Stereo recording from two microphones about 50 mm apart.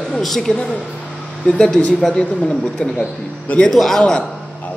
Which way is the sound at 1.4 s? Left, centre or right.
Centre.